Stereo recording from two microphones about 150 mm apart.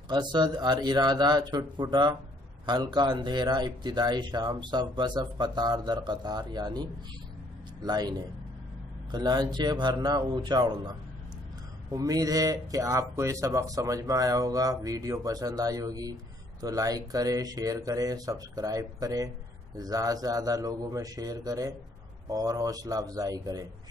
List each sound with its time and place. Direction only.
0.1 s speech: 30° right (ahead or behind)